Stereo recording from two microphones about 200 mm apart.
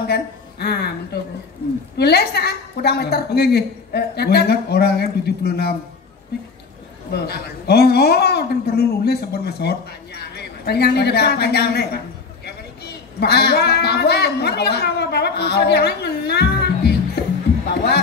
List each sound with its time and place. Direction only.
0.0 s a woman's voice: 55° left (ahead or behind)
2.0 s a woman's voice: 55° left (ahead or behind)
7.1 s a woman's voice: 55° left (ahead or behind)